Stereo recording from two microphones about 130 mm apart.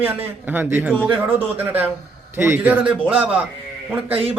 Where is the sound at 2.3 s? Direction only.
20° right (ahead or behind).